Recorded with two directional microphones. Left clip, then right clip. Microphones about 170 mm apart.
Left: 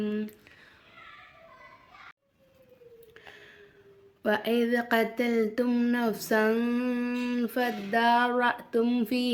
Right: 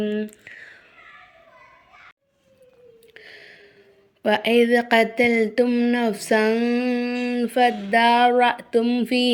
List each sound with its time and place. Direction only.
0.0 s speech: 15° right (ahead or behind)
3.2 s a sound: 20° right (ahead or behind)
4.2 s speech: 20° right (ahead or behind)
6.7 s speech: 5° right (ahead or behind)